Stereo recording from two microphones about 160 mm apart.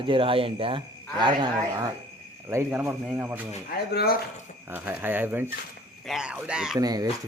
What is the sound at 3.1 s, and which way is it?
Speech, 10° right (ahead or behind).